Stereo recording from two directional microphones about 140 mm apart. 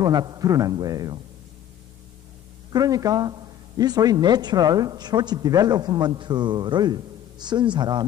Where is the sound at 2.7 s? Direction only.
25° right (ahead or behind).